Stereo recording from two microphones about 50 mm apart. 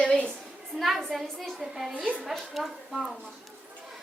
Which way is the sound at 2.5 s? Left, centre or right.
Centre.